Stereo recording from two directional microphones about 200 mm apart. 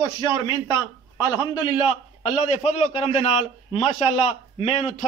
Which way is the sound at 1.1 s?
20° left (ahead or behind).